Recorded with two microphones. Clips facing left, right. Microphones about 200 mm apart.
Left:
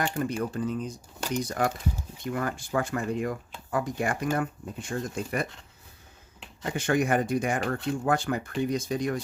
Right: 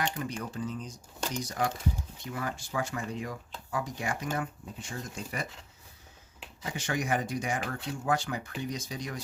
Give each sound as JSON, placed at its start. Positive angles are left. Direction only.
{"t": 0.0, "sound": "speech", "side_deg": 50}
{"t": 6.7, "sound": "speech", "side_deg": 55}